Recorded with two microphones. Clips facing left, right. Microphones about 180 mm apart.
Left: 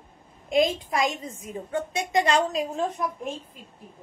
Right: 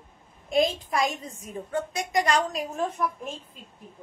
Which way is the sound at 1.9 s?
25° left (ahead or behind).